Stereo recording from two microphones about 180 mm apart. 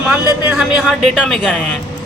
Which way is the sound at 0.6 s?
5° right (ahead or behind).